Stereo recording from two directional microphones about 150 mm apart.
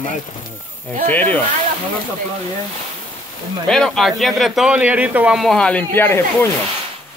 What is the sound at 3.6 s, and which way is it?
Speech, centre (ahead or behind).